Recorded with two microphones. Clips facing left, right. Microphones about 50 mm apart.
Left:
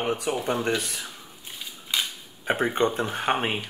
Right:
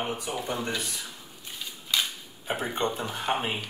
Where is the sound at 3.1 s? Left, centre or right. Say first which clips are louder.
Left 3 dB; left.